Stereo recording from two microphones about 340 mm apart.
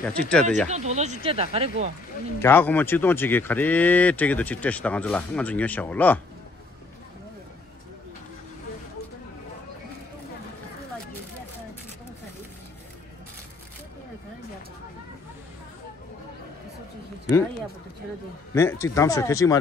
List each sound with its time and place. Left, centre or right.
0.0 s speech: centre
0.7 s speech: centre
2.4 s speech: centre
18.5 s speech: centre